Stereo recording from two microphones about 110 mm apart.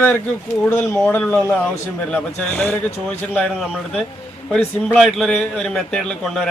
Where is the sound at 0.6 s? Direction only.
15° left (ahead or behind).